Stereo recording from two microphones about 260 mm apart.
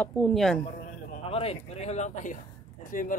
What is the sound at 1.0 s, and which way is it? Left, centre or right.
Speech, left.